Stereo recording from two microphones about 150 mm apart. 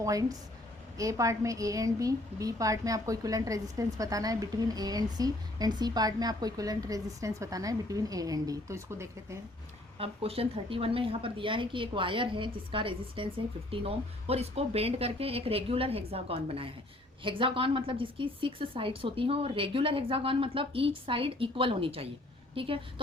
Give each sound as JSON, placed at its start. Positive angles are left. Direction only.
{"t": 0.0, "sound": "a woman's voice", "side_deg": -25}
{"t": 10.0, "sound": "a woman's voice", "side_deg": -40}